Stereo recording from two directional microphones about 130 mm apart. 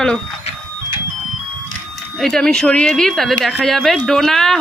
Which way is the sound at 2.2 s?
5° left (ahead or behind).